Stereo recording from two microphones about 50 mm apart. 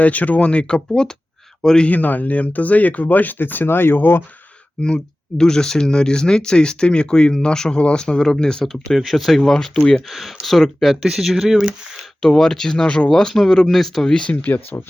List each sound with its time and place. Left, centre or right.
0.0 s speech: left
0.9 s speech: centre
1.9 s speech: left
4.8 s speech: centre
10.1 s speech: centre
12.2 s speech: centre
14.1 s speech: centre
14.4 s speech: left